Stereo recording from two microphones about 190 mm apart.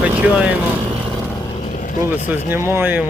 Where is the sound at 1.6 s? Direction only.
45° left (ahead or behind).